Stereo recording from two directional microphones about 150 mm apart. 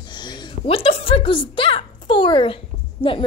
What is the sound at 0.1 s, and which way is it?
A woman's voice, 30° left (ahead or behind).